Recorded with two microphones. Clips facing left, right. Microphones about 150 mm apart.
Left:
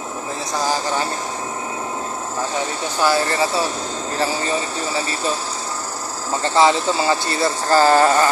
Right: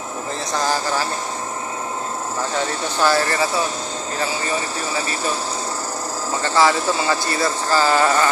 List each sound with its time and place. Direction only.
0.6 s speech: 15° left (ahead or behind)
3.0 s speech: 15° left (ahead or behind)
6.4 s speech: 25° left (ahead or behind)
7.7 s speech: 45° left (ahead or behind)